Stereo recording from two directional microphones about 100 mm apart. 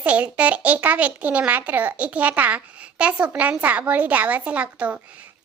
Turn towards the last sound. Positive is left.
turn(degrees=-15)  # may be behind; listen again after turning